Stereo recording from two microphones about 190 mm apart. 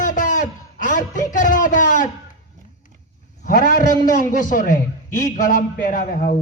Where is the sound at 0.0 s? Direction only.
45° left (ahead or behind).